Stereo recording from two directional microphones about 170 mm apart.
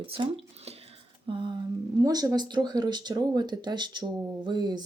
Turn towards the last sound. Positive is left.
turn(degrees=-25)  # may be behind; listen again after turning